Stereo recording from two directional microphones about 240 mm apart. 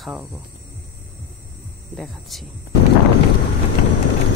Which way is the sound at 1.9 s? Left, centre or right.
Centre.